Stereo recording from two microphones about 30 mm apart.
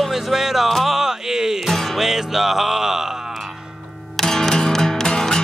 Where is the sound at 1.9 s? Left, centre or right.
Centre.